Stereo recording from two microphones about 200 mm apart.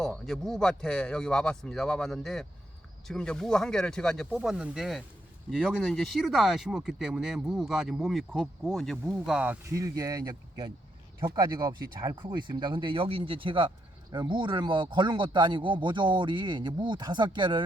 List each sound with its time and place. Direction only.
0.0 s speech: centre (ahead or behind); by 17.6 s 20° right (ahead or behind)